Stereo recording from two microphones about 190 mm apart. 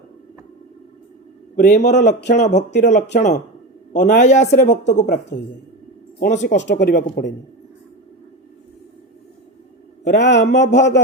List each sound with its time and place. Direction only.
1.5 s a woman's voice: 40° left (ahead or behind)
6.1 s a woman's voice: 40° left (ahead or behind)
6.6 s speech: 65° left (ahead or behind)
10.0 s speech: 65° left (ahead or behind)